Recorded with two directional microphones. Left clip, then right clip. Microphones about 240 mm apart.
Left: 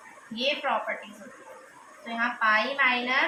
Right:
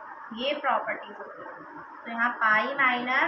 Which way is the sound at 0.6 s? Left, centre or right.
Left.